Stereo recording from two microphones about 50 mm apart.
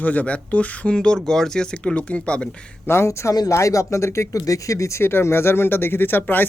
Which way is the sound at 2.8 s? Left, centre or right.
Left.